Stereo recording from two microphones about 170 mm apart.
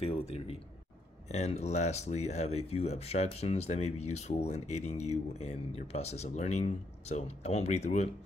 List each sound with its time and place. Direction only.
1.3 s speech: 40° left (ahead or behind)